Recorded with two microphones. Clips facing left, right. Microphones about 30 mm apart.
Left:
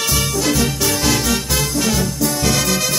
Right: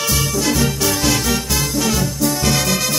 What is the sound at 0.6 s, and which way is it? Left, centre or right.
Music, centre.